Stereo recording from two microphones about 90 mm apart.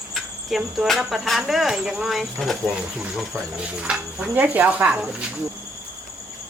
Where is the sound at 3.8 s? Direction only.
5° right (ahead or behind).